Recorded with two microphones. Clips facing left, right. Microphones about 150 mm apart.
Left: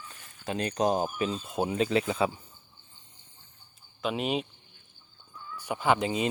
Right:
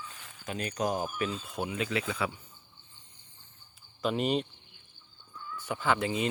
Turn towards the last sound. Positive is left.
turn(degrees=20)  # may be behind; listen again after turning